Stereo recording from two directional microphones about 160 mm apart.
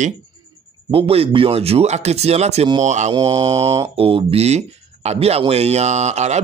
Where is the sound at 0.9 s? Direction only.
35° right (ahead or behind).